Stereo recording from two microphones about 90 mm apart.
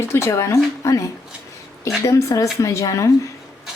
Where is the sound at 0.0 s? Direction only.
30° left (ahead or behind).